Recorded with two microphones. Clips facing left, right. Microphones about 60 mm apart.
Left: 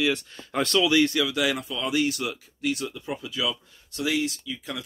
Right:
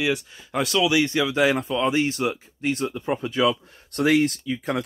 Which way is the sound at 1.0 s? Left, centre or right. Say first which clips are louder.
Right 4 dB; right.